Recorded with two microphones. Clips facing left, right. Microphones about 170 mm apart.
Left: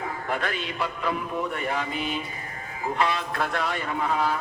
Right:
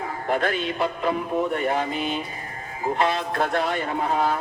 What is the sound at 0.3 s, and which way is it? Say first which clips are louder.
A man's voice: right 7 dB; 35° right (ahead or behind).